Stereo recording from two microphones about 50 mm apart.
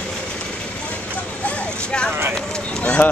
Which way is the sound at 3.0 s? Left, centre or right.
Left.